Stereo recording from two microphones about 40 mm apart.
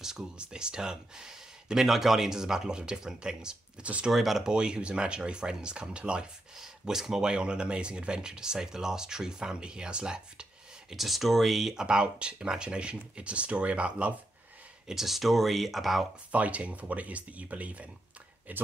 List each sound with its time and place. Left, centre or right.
0.2 s speech: right
4.1 s speech: centre
4.5 s speech: right
6.5 s speech: centre
10.9 s speech: centre
11.7 s speech: right
14.9 s speech: centre
16.3 s speech: right